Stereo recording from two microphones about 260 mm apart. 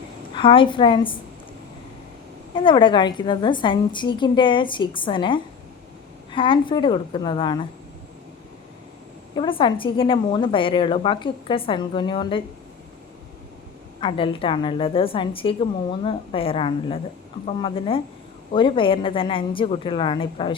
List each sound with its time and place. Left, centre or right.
0.3 s speech: centre
2.6 s speech: centre
9.3 s speech: centre
14.0 s speech: centre